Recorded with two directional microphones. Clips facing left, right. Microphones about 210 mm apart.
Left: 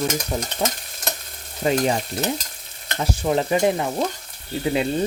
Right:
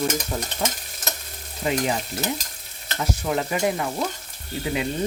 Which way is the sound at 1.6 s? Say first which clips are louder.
Left 4 dB; 40° left (ahead or behind).